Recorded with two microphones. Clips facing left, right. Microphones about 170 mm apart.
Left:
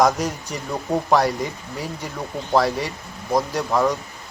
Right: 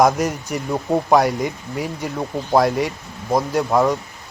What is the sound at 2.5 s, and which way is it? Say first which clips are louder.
Speech: right 3 dB; 10° right (ahead or behind).